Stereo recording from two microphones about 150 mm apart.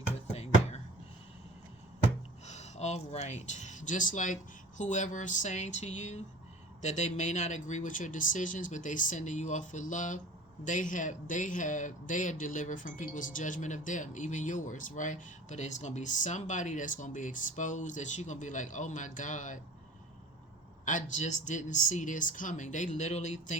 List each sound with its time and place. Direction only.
2.5 s speech: 50° left (ahead or behind)
20.8 s speech: 55° left (ahead or behind)